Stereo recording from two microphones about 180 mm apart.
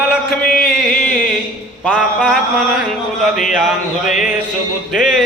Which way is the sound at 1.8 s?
Centre (ahead or behind).